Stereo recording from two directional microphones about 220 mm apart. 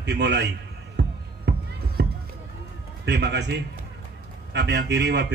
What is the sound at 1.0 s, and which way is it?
Music, 50° right (ahead or behind).